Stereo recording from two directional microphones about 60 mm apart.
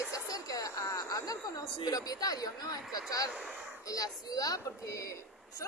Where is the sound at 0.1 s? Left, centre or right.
Left.